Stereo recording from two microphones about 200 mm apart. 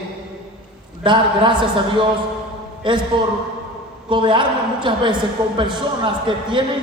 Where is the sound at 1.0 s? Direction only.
25° right (ahead or behind).